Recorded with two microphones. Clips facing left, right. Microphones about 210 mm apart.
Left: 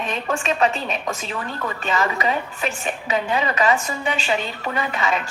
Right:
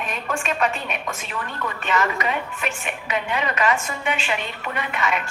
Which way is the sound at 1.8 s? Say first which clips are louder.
Left 1 dB; 30° left (ahead or behind).